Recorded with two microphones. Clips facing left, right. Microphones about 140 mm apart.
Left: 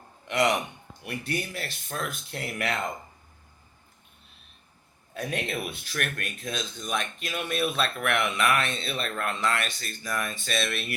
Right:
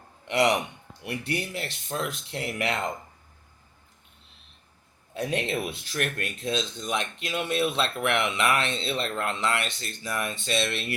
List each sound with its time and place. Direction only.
0.3 s speech: 25° right (ahead or behind)
5.1 s speech: 25° right (ahead or behind)